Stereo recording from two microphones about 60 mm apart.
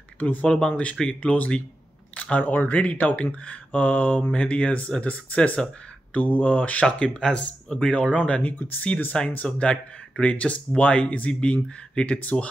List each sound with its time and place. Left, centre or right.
0.2 s speech: left
0.5 s speech: centre